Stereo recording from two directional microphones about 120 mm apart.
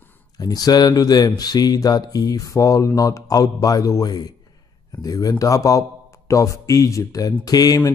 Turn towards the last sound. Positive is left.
turn(degrees=30)  # may be behind; listen again after turning